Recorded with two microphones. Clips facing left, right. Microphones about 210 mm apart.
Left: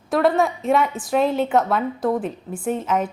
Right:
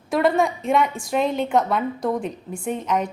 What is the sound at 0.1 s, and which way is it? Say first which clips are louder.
A woman's voice: left 1 dB; centre (ahead or behind).